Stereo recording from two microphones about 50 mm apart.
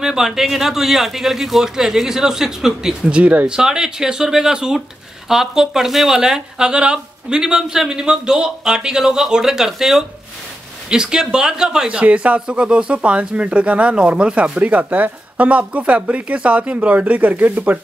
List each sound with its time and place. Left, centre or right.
0.0 s speech: centre
3.1 s speech: right
3.5 s speech: centre; by 17.7 s right